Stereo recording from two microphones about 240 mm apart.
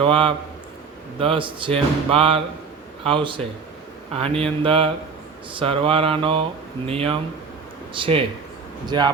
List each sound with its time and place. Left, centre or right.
0.0 s speech: right